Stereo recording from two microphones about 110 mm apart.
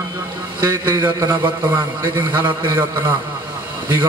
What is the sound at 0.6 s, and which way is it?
Speech, 20° right (ahead or behind).